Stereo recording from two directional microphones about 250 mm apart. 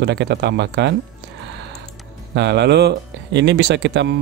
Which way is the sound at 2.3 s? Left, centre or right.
Right.